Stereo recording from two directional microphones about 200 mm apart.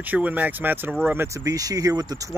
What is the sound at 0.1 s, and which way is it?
Speech, 10° right (ahead or behind).